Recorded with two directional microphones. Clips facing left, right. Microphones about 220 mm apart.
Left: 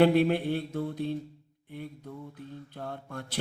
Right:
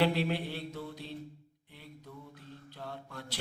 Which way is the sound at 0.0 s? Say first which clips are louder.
Left 8 dB; 50° left (ahead or behind).